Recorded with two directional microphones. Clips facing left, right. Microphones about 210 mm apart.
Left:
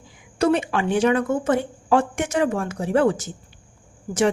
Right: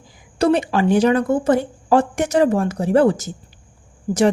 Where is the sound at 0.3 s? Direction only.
35° right (ahead or behind).